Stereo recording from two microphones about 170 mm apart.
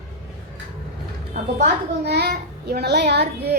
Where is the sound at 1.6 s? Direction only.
70° right (ahead or behind).